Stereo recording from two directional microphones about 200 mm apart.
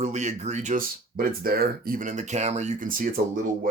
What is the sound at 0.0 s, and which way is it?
Speech, 35° right (ahead or behind).